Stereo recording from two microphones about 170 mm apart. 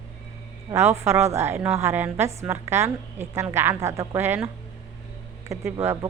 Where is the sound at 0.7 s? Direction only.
15° right (ahead or behind).